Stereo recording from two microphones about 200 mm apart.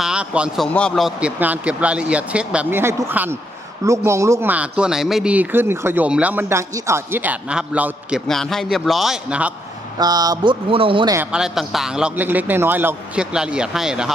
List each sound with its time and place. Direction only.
0.0 s a man's voice: 5° right (ahead or behind)
10.0 s speech: 20° right (ahead or behind)
11.3 s a man's voice: 5° right (ahead or behind)